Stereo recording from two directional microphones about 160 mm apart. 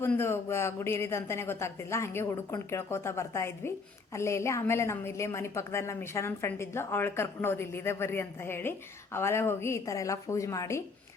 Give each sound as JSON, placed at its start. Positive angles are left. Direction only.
{"t": 0.0, "sound": "speech", "side_deg": 15}